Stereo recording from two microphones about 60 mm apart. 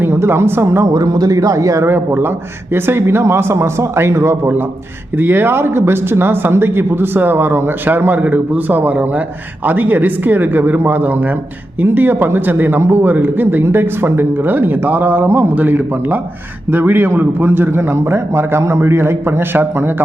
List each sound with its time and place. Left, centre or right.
0.0 s a man's voice: right
0.9 s speech: right
1.9 s a man's voice: right
5.1 s a man's voice: right